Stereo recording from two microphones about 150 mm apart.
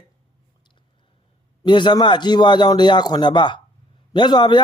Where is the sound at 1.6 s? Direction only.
30° left (ahead or behind).